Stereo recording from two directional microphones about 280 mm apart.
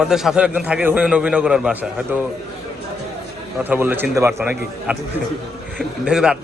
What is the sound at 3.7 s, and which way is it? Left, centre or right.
A man's voice, centre.